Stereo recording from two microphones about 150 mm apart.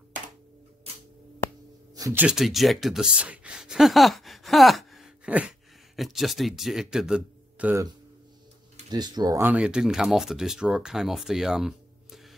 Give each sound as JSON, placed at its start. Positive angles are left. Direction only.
{"t": 2.1, "sound": "speech", "side_deg": -5}
{"t": 8.9, "sound": "speech", "side_deg": -25}
{"t": 9.4, "sound": "speech", "side_deg": -10}